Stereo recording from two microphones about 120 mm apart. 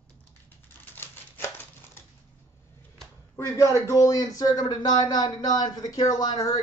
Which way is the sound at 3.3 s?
25° left (ahead or behind).